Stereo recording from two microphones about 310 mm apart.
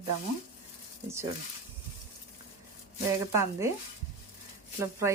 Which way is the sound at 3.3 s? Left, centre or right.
Centre.